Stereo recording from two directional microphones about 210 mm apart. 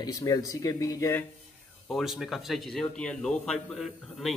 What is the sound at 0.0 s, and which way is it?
Speech, 15° left (ahead or behind).